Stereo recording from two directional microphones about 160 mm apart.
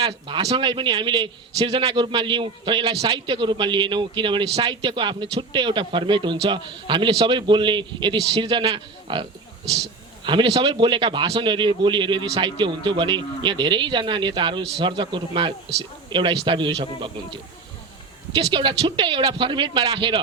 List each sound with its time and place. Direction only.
0.0 s speech: 30° right (ahead or behind)
10.2 s speech: 30° right (ahead or behind)